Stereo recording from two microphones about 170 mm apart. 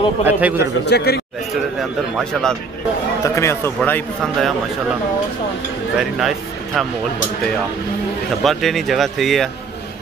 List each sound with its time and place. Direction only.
0.2 s a man's voice: 10° right (ahead or behind)
0.8 s speech: 75° left (ahead or behind)
1.8 s speech: centre (ahead or behind)
3.3 s speech: 15° left (ahead or behind)
5.9 s speech: centre (ahead or behind)
8.5 s speech: centre (ahead or behind)